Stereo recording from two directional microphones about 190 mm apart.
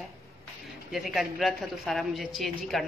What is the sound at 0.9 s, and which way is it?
A woman's voice, centre (ahead or behind).